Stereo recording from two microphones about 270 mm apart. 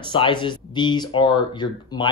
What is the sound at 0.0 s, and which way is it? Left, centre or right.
A man's voice, centre.